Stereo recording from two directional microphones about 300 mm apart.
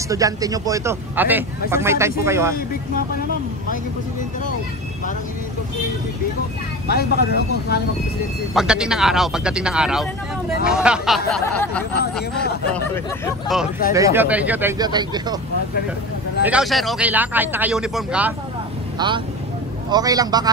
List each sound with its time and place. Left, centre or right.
0.1 s a man's voice: centre
6.9 s speech: left
8.5 s speech: centre
13.9 s a man's voice: centre
16.4 s speech: centre
18.9 s a man's voice: centre